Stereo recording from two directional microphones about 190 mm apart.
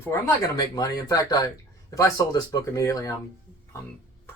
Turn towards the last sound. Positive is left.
turn(degrees=15)  # may be behind; listen again after turning